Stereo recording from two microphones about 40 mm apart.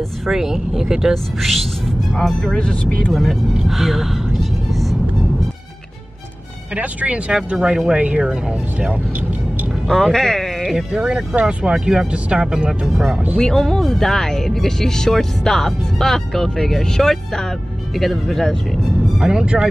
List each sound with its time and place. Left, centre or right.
0.3 s speech: centre
1.1 s speech: centre
2.7 s speech: left
3.1 s speech: centre
6.7 s speech: right
7.7 s speech: centre
9.8 s speech: centre
10.6 s music: centre
10.9 s speech: right
13.4 s speech: centre
17.9 s speech: centre
19.4 s speech: right